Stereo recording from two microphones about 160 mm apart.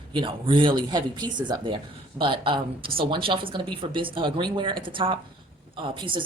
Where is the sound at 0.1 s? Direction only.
30° right (ahead or behind).